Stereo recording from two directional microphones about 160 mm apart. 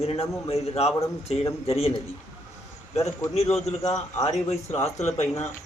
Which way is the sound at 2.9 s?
20° left (ahead or behind).